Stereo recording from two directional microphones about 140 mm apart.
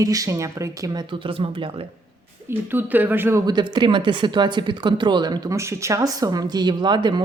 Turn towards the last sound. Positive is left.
turn(degrees=-30)  # may be behind; listen again after turning